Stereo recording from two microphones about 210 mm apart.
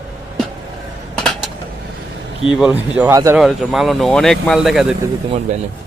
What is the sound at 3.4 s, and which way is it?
Speech, centre (ahead or behind).